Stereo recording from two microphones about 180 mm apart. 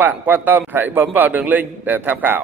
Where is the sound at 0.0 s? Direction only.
10° right (ahead or behind).